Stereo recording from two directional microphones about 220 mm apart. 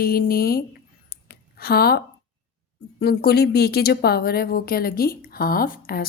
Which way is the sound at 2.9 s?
45° left (ahead or behind).